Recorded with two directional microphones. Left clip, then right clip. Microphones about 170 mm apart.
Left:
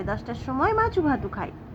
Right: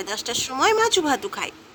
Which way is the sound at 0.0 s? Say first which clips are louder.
Right 5 dB; 50° right (ahead or behind).